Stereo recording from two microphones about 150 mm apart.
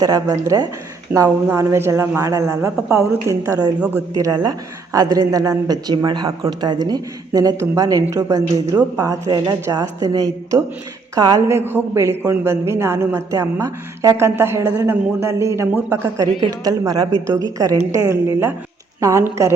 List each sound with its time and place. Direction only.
0.0 s a woman's voice: 25° right (ahead or behind)